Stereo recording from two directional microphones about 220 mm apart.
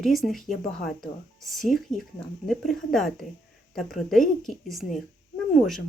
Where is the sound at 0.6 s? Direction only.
35° left (ahead or behind).